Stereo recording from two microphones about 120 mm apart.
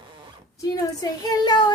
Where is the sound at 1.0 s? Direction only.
30° left (ahead or behind).